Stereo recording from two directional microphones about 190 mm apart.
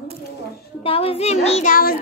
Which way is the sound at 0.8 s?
30° left (ahead or behind).